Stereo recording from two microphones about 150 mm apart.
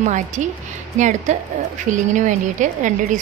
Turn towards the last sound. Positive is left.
turn(degrees=-55)  # may be behind; listen again after turning